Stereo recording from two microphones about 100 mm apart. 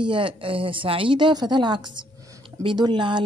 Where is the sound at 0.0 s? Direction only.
55° right (ahead or behind).